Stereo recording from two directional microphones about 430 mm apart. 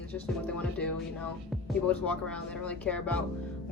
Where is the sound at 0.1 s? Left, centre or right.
Centre.